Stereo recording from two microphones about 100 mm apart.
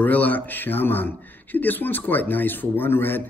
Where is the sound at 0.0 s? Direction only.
15° left (ahead or behind).